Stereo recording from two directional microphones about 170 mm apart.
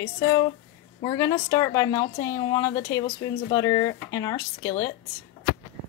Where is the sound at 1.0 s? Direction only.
25° left (ahead or behind).